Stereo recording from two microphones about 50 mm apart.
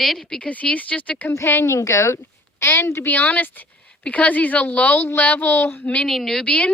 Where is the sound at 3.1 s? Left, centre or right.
Left.